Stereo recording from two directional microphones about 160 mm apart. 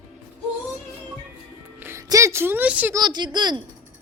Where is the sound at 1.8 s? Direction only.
20° right (ahead or behind).